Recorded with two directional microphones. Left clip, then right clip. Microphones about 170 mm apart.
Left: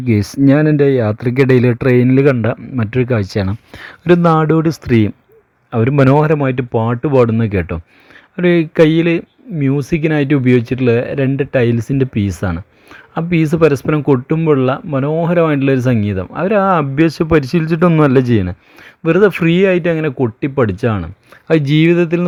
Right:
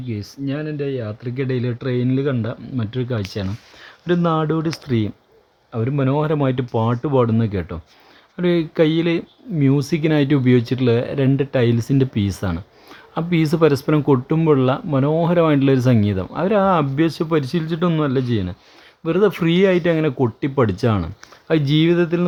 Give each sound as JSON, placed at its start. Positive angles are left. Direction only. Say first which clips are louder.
{"t": 0.1, "sound": "speech", "louder": "left 15 dB", "side_deg": 60}
{"t": 5.7, "sound": "speech", "louder": "left 9 dB", "side_deg": 50}
{"t": 6.1, "sound": "speech", "louder": "left 6 dB", "side_deg": 30}
{"t": 19.0, "sound": "speech", "louder": "left 6 dB", "side_deg": 25}
{"t": 21.4, "sound": "speech", "louder": "left 5 dB", "side_deg": 30}